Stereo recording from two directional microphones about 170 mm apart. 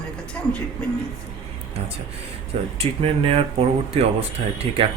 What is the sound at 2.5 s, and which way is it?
Speech, 35° right (ahead or behind).